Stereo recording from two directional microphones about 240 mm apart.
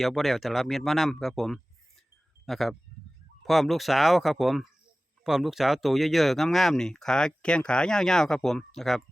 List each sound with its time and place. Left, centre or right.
0.0 s speech: centre